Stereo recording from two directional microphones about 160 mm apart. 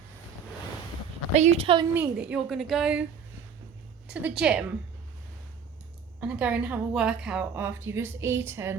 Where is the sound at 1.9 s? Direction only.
10° right (ahead or behind).